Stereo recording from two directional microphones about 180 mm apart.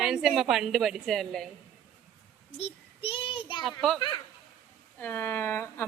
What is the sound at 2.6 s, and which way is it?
Child singing, 35° left (ahead or behind).